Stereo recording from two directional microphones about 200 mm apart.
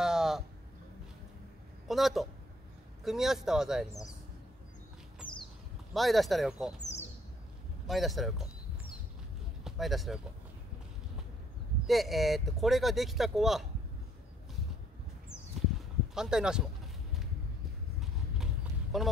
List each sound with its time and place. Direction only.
0.0 s a sound: 5° right (ahead or behind)
1.9 s speech: centre (ahead or behind)
5.9 s speech: centre (ahead or behind)
6.8 s bird: 35° left (ahead or behind)
7.8 s speech: centre (ahead or behind)
9.7 s speech: centre (ahead or behind)
11.8 s speech: centre (ahead or behind)
16.2 s speech: 5° right (ahead or behind)
18.4 s clip-clop: centre (ahead or behind)